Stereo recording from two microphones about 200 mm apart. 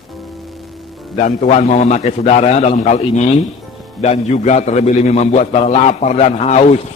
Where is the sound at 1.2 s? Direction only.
35° left (ahead or behind).